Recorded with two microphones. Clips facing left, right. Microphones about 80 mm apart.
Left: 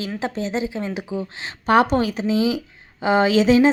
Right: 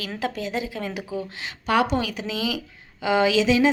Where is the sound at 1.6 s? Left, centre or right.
Left.